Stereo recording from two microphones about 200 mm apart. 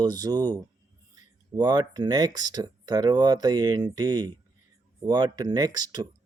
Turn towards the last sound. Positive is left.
turn(degrees=-20)  # may be behind; listen again after turning